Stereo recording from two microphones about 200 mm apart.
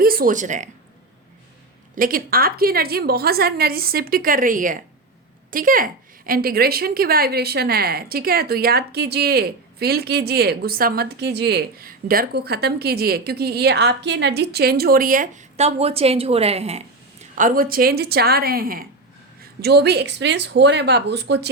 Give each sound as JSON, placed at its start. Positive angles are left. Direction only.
{"t": 0.0, "sound": "speech", "side_deg": -45}
{"t": 2.0, "sound": "a woman's voice", "side_deg": -45}
{"t": 17.3, "sound": "a woman's voice", "side_deg": -45}